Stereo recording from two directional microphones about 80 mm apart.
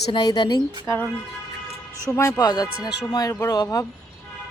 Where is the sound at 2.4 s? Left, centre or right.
Left.